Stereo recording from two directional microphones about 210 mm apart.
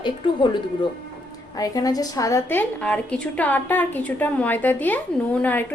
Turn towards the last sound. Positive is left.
turn(degrees=10)  # may be behind; listen again after turning